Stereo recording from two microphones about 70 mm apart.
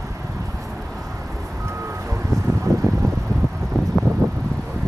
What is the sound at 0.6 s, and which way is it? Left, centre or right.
Vehicle, centre.